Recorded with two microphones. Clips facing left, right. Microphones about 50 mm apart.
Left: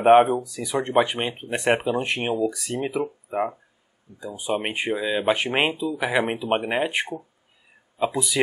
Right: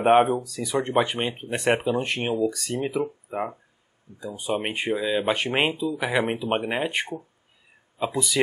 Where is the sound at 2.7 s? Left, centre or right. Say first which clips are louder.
Even; centre.